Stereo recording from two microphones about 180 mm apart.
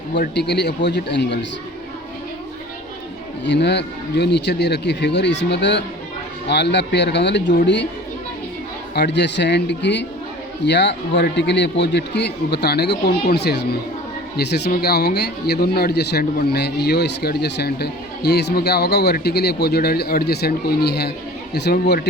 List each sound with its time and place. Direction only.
0.1 s a man's voice: 70° left (ahead or behind)
3.4 s a man's voice: 75° left (ahead or behind)
9.0 s a man's voice: 70° left (ahead or behind)